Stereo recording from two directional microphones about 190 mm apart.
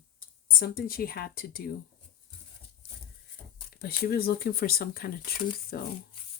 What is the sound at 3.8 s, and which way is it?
Speech, 55° left (ahead or behind).